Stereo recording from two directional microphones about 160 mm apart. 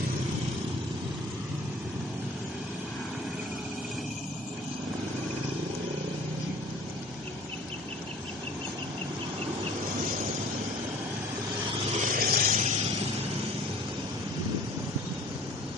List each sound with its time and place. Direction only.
12.0 s vehicle: 55° right (ahead or behind)